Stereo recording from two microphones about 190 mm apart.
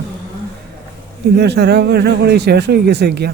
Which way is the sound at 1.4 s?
60° right (ahead or behind).